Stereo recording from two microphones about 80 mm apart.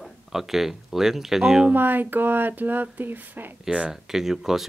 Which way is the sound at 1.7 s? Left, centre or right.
Right.